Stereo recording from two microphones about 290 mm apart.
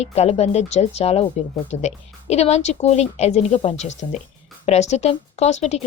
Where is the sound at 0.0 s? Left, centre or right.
Left.